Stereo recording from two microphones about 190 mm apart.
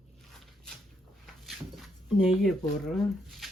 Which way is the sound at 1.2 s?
Centre (ahead or behind).